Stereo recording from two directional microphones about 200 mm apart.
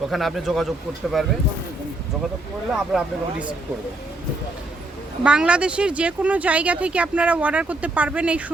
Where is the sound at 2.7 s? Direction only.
5° right (ahead or behind).